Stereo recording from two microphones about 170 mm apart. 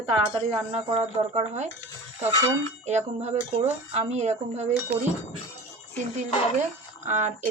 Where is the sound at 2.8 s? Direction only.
40° right (ahead or behind).